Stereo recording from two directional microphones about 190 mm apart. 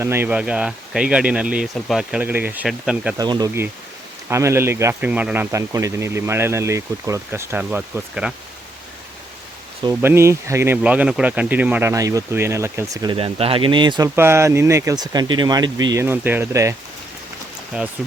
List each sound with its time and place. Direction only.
0.0 s speech: 10° right (ahead or behind)
3.2 s speech: 20° right (ahead or behind); by 8.3 s 5° right (ahead or behind)
9.8 s speech: 15° right (ahead or behind)
14.2 s speech: 15° right (ahead or behind)
17.7 s speech: 5° right (ahead or behind)